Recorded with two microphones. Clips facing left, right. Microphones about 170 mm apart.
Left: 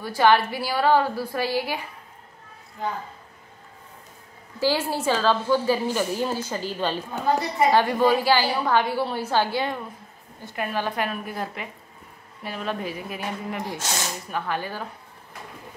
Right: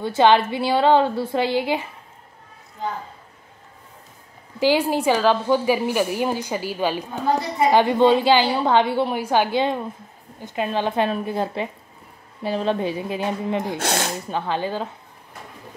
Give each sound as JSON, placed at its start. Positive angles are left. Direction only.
{"t": 0.0, "sound": "a woman's voice", "side_deg": -20}
{"t": 4.6, "sound": "a woman's voice", "side_deg": -15}
{"t": 7.7, "sound": "a woman's voice", "side_deg": -20}
{"t": 13.7, "sound": "speech", "side_deg": -60}
{"t": 14.3, "sound": "a woman's voice", "side_deg": -25}